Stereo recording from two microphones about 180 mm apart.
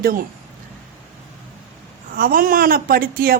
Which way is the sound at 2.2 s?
50° right (ahead or behind).